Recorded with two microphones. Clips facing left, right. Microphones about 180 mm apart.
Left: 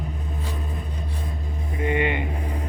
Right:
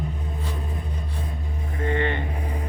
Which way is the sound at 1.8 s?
15° left (ahead or behind).